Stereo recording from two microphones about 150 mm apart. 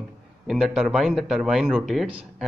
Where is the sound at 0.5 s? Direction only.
Centre (ahead or behind).